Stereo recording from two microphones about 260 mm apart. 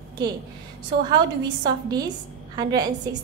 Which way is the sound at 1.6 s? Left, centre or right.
Centre.